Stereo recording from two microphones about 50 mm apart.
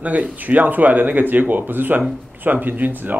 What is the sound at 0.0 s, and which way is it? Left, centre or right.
Speech, right.